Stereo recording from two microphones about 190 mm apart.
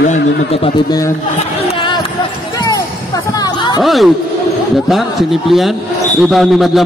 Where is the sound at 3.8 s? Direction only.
Centre (ahead or behind).